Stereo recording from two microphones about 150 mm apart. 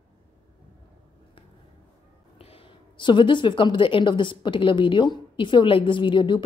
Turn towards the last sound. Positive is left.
turn(degrees=35)  # may be behind; listen again after turning